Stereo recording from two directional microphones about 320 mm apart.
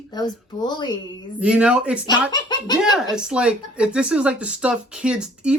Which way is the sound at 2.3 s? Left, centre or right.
Centre.